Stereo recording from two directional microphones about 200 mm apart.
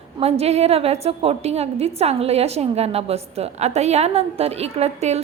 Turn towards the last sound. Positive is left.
turn(degrees=-30)  # may be behind; listen again after turning